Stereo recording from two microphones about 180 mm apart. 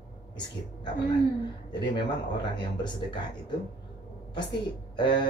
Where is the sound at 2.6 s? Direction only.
25° left (ahead or behind).